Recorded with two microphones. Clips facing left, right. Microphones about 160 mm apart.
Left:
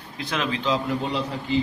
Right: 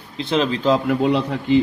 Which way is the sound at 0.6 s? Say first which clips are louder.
Right 8 dB; 55° right (ahead or behind).